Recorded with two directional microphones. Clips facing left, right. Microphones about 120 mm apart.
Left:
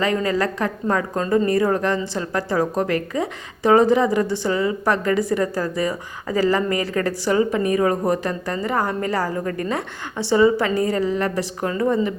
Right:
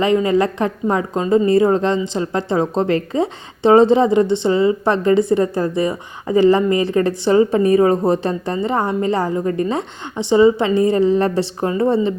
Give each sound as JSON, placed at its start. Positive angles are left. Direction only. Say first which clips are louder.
{"t": 0.0, "sound": "a woman's voice", "louder": "right 5 dB", "side_deg": -20}